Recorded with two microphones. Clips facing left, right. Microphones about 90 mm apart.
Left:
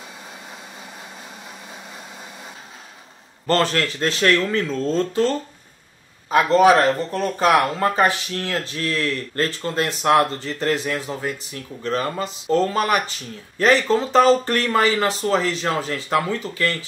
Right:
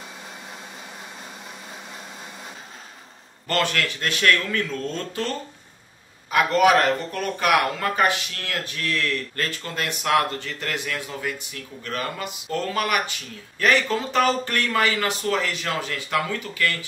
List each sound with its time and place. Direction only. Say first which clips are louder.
3.4 s speech: left 4 dB; 35° left (ahead or behind)
6.3 s speech: left 4 dB; 30° left (ahead or behind)